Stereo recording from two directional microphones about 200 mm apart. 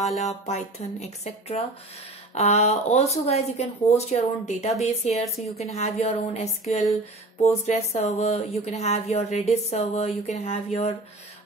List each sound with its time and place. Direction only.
0.2 s speech: 35° left (ahead or behind)
5.2 s speech: centre (ahead or behind)
5.6 s speech: 30° left (ahead or behind)